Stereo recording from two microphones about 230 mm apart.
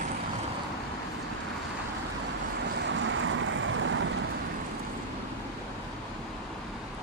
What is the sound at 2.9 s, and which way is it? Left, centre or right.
Vehicle, right.